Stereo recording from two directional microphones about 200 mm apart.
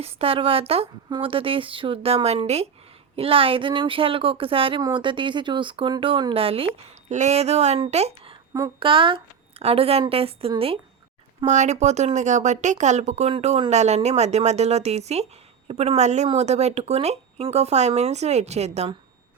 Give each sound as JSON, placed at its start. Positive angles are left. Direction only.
{"t": 0.0, "sound": "speech", "side_deg": -30}